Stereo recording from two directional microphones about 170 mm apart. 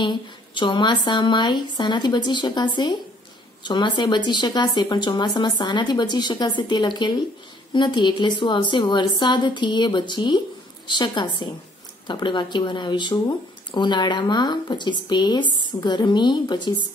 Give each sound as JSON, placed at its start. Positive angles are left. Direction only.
{"t": 0.0, "sound": "speech", "side_deg": 25}